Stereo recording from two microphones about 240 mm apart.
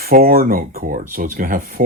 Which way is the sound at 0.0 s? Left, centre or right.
Right.